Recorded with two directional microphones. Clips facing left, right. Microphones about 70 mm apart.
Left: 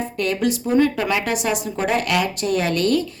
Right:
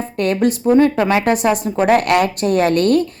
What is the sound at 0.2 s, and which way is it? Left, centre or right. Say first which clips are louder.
A woman's voice: right 6 dB; right.